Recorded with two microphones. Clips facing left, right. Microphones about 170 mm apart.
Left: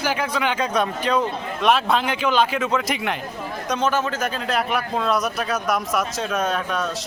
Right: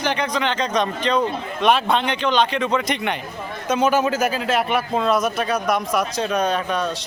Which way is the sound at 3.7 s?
10° right (ahead or behind).